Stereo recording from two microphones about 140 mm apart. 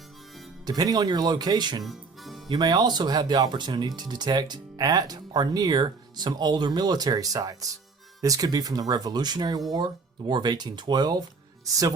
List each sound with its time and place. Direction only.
0.6 s speech: 30° right (ahead or behind)
1.8 s music: centre (ahead or behind)
2.5 s speech: 30° right (ahead or behind)